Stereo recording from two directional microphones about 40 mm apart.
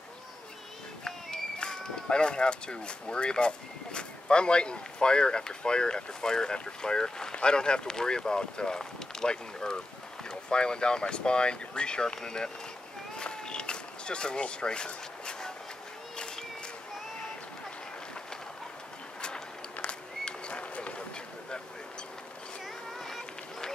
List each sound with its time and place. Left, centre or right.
1.0 s speech: centre
13.1 s a sound: left
19.2 s run: left
22.9 s run: centre